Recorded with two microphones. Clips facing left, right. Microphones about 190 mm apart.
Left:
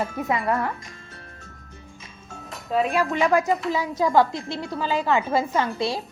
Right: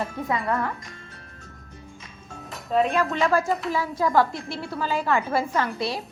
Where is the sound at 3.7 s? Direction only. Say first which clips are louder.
Left 2 dB; 20° left (ahead or behind).